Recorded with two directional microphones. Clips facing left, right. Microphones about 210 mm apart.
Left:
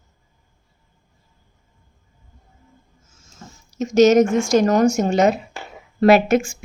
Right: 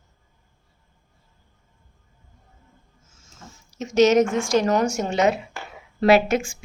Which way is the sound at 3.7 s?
40° left (ahead or behind).